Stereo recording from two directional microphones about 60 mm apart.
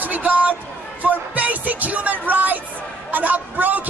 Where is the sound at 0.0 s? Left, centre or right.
Right.